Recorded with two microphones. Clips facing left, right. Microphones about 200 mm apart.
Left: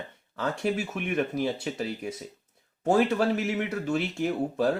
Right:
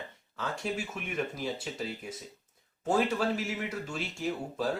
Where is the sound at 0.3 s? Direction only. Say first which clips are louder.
Left 6 dB; 60° left (ahead or behind).